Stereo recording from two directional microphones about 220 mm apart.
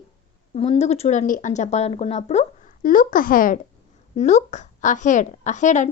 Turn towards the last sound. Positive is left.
turn(degrees=35)  # may be behind; listen again after turning